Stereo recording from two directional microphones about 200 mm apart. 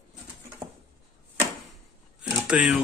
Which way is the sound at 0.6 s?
15° right (ahead or behind).